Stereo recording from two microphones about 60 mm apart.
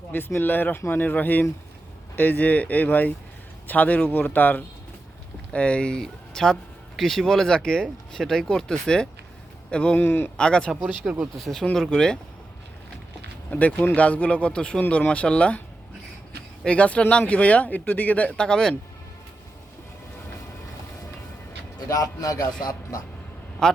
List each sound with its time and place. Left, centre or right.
0.3 s speech: left; by 10.0 s centre
10.0 s speech: left
10.3 s speech: centre
11.0 s speech: centre
11.3 s speech: centre
13.5 s speech: left
16.6 s speech: left
21.8 s a man's voice: left
23.6 s a man's voice: centre